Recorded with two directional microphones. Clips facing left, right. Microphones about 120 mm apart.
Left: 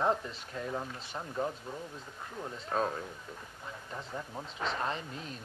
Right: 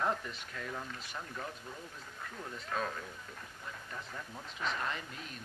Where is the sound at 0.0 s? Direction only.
25° left (ahead or behind).